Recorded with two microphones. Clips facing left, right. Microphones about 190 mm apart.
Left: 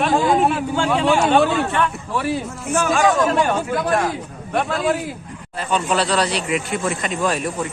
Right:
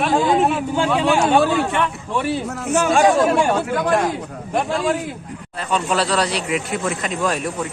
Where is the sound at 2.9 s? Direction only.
30° right (ahead or behind).